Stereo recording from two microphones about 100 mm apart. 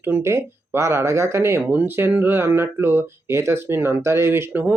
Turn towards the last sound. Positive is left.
turn(degrees=-25)  # may be behind; listen again after turning